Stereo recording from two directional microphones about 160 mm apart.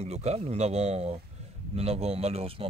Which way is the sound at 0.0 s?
40° right (ahead or behind).